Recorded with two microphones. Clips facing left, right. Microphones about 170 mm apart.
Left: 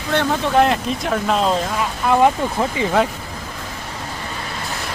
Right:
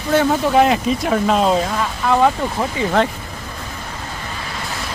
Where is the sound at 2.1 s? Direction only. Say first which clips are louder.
Left 1 dB; 15° left (ahead or behind).